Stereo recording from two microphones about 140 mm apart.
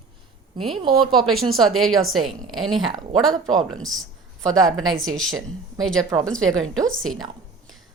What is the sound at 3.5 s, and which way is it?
A woman's voice, centre (ahead or behind).